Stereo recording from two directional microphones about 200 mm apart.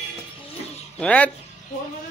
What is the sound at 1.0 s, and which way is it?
Speech, 5° left (ahead or behind).